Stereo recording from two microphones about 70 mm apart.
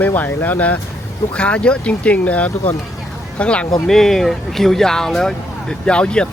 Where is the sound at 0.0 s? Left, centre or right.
Left.